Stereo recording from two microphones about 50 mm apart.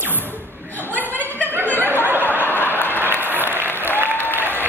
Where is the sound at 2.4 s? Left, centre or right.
Left.